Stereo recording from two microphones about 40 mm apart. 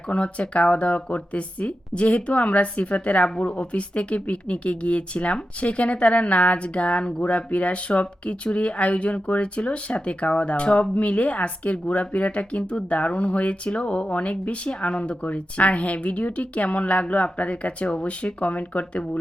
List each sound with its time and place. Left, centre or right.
0.1 s speech: left